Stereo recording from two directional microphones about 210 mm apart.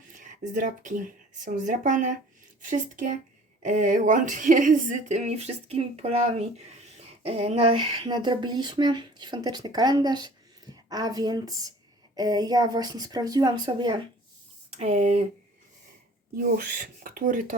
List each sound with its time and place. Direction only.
0.1 s speech: 40° right (ahead or behind)
16.3 s speech: 40° right (ahead or behind)